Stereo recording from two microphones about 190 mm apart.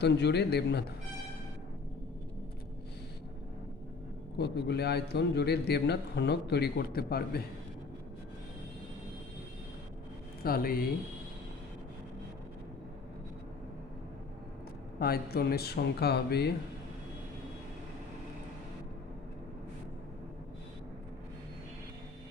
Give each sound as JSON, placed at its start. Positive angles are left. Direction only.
{"t": 0.0, "sound": "a man's voice", "side_deg": 60}
{"t": 4.4, "sound": "a man's voice", "side_deg": 60}
{"t": 10.4, "sound": "speech", "side_deg": 50}
{"t": 14.9, "sound": "a man's voice", "side_deg": 55}